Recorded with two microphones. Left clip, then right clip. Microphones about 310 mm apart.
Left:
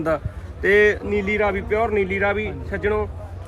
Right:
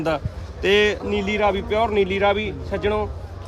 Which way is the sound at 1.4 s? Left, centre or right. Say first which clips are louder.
Right 3 dB; centre.